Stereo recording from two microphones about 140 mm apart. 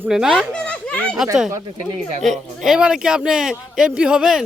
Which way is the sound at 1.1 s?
5° right (ahead or behind).